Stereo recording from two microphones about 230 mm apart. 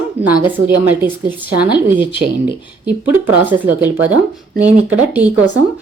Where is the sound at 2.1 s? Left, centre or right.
Left.